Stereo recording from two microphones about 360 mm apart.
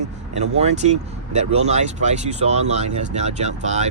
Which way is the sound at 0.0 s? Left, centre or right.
Centre.